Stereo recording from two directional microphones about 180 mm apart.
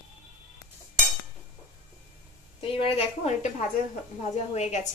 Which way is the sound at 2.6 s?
30° left (ahead or behind).